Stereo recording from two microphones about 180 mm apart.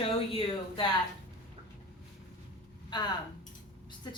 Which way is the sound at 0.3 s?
30° left (ahead or behind).